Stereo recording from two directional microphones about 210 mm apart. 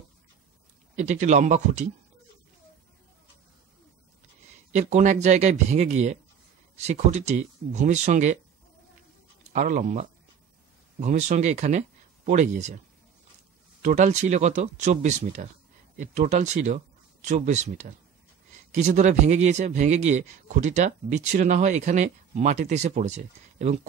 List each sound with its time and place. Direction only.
0.9 s a man's voice: 35° right (ahead or behind)
4.7 s a man's voice: 35° right (ahead or behind)
9.5 s a man's voice: 35° right (ahead or behind)
13.8 s a man's voice: 35° right (ahead or behind)